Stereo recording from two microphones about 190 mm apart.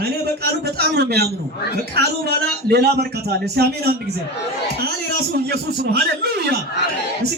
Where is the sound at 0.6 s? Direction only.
55° right (ahead or behind).